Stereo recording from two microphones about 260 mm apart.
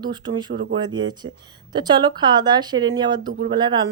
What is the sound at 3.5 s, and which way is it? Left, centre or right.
Speech, centre.